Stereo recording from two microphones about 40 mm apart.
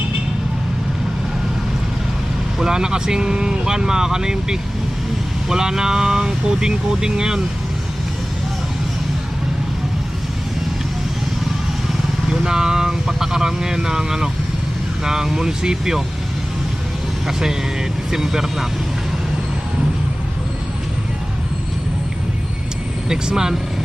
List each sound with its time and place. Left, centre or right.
2.6 s speech: centre
12.3 s speech: centre
18.1 s speech: centre
23.0 s speech: centre